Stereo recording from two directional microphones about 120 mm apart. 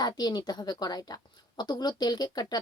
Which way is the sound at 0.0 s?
35° left (ahead or behind).